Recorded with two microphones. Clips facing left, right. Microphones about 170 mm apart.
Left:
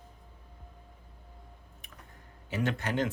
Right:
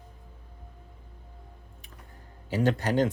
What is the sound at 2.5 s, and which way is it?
Speech, 35° right (ahead or behind).